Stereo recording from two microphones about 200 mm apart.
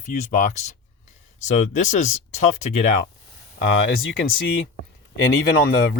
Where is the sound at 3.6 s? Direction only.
75° left (ahead or behind).